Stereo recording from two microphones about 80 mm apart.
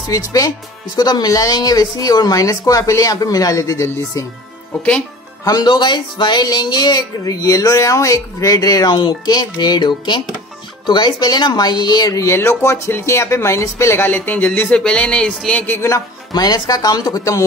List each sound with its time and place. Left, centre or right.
0.0 s speech: left
5.4 s speech: left
5.7 s speech: left
6.4 s speech: left
8.9 s speech: left
12.3 s speech: left
14.0 s speech: left
14.8 s music: centre
15.7 s speech: left
16.3 s speech: left